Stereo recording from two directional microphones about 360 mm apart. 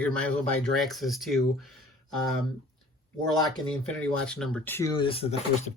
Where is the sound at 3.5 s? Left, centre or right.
Centre.